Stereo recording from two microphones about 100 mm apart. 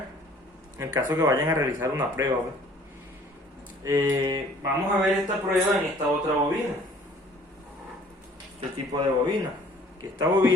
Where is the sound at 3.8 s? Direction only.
30° right (ahead or behind).